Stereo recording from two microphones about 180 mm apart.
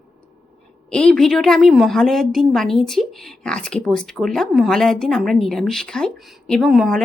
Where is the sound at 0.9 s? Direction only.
5° left (ahead or behind).